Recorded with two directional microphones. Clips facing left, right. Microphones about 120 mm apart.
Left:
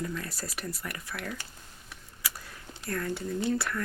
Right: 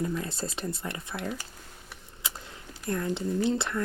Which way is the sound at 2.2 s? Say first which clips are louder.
Right 1 dB; 25° right (ahead or behind).